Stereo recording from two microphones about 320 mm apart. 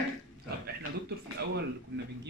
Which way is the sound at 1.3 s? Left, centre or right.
Right.